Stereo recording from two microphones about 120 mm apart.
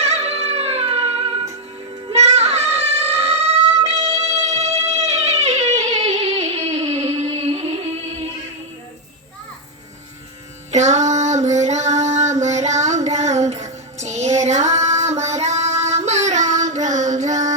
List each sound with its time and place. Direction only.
0.0 s music: 60° right (ahead or behind)
2.1 s child singing: 60° right (ahead or behind)
4.9 s a sound: 65° right (ahead or behind)
10.7 s female singing: 75° right (ahead or behind)
13.1 s music: 70° right (ahead or behind)